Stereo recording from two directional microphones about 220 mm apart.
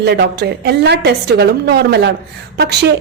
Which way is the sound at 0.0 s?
50° right (ahead or behind).